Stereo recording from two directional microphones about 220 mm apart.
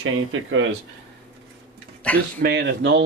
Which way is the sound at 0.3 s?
65° right (ahead or behind).